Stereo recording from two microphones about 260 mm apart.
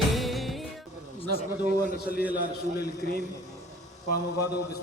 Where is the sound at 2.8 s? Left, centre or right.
Left.